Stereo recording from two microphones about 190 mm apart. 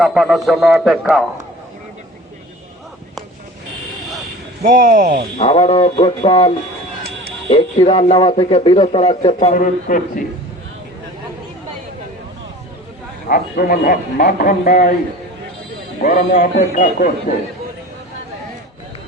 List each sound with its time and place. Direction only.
0.0 s a man's voice: centre (ahead or behind)
4.6 s speech: 45° right (ahead or behind)
5.4 s a man's voice: 35° left (ahead or behind)
7.5 s a man's voice: 30° left (ahead or behind)
13.2 s a man's voice: 50° left (ahead or behind)
16.0 s a man's voice: 45° left (ahead or behind)